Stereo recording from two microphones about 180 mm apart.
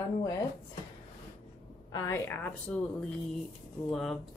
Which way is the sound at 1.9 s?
15° left (ahead or behind).